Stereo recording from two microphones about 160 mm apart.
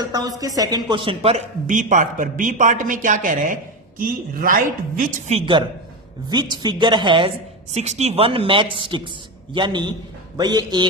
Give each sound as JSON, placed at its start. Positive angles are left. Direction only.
{"t": 0.0, "sound": "speech", "side_deg": -25}
{"t": 5.3, "sound": "a woman's voice", "side_deg": -30}